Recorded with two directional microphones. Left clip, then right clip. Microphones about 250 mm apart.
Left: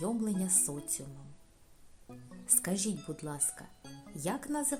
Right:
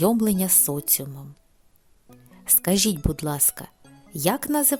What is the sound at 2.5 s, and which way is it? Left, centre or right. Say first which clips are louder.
A woman's voice: right 12 dB; right.